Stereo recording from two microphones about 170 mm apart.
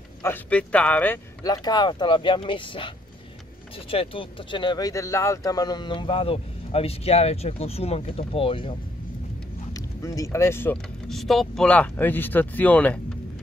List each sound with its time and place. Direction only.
0.2 s speech: 10° left (ahead or behind)
1.4 s speech: 25° left (ahead or behind)
3.9 s speech: 35° left (ahead or behind)
9.8 s speech: 20° left (ahead or behind)